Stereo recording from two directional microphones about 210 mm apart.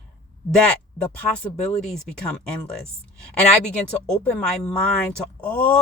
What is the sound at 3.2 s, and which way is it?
Speech, 5° left (ahead or behind).